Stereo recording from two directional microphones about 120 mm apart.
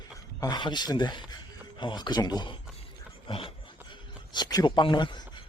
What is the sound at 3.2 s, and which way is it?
Dog, 50° left (ahead or behind).